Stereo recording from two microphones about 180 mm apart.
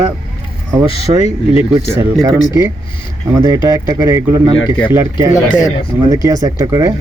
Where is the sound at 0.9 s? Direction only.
35° left (ahead or behind).